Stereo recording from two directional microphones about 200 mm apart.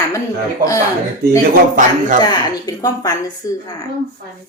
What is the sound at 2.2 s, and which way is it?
Speech, 20° left (ahead or behind).